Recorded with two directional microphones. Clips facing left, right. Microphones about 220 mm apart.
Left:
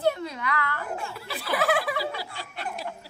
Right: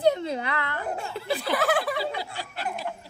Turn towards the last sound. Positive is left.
turn(degrees=0)  # may be behind; listen again after turning